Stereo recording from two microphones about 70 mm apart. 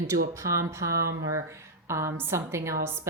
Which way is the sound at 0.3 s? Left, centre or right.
Right.